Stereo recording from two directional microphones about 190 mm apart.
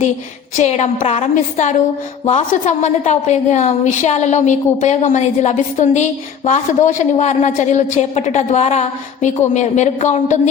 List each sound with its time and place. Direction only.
0.5 s a woman's voice: 35° left (ahead or behind)